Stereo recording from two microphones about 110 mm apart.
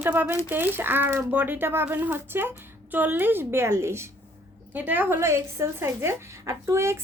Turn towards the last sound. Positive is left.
turn(degrees=-25)  # may be behind; listen again after turning